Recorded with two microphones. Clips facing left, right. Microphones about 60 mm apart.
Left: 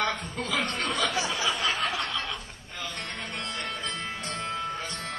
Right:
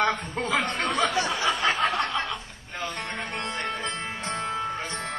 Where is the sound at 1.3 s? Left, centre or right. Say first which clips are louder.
Right 4 dB; right.